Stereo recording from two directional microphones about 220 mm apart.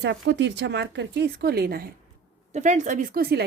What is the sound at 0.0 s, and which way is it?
A woman's voice, 50° right (ahead or behind).